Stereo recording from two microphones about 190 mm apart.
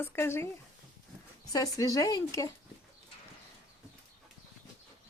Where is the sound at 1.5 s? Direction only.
20° left (ahead or behind).